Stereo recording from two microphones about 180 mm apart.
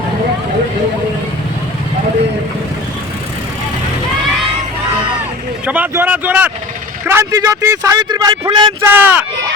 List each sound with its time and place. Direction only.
5.6 s a man's voice: 10° right (ahead or behind); by 8.7 s 25° right (ahead or behind)
8.8 s speech: 10° right (ahead or behind)